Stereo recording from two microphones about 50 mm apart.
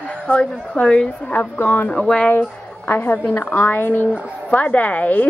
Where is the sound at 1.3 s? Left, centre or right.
Left.